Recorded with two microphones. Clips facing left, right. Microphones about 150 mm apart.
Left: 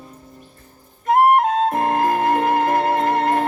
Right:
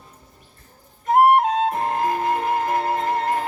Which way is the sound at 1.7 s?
55° left (ahead or behind).